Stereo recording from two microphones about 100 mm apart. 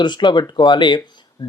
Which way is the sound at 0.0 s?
50° left (ahead or behind).